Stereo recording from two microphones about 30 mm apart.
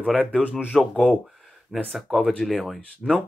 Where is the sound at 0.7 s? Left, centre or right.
Centre.